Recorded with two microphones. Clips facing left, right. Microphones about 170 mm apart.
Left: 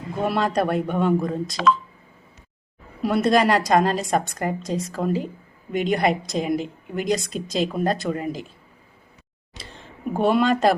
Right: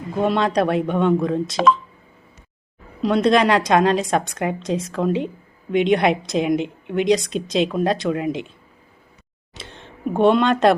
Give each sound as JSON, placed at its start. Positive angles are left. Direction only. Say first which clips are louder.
{"t": 0.3, "sound": "a woman's voice", "louder": "right 2 dB", "side_deg": 5}
{"t": 1.6, "sound": "speech", "louder": "right 3 dB", "side_deg": -40}
{"t": 3.0, "sound": "a woman's voice", "louder": "right 2 dB", "side_deg": 5}
{"t": 10.2, "sound": "a woman's voice", "louder": "right 3 dB", "side_deg": 5}